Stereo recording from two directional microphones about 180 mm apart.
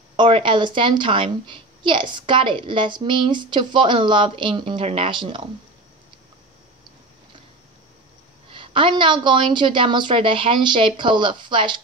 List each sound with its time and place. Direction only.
0.1 s a woman's voice: 25° right (ahead or behind)
8.5 s a woman's voice: 30° right (ahead or behind)